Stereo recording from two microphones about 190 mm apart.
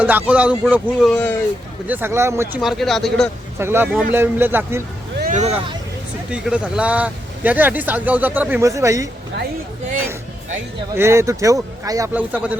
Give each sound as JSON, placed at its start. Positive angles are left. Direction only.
{"t": 0.0, "sound": "speech", "side_deg": -10}
{"t": 1.9, "sound": "speech", "side_deg": -10}
{"t": 2.6, "sound": "speech", "side_deg": 0}
{"t": 3.6, "sound": "speech", "side_deg": -10}
{"t": 5.2, "sound": "vehicle", "side_deg": -40}
{"t": 6.3, "sound": "speech", "side_deg": -5}
{"t": 10.9, "sound": "speech", "side_deg": -15}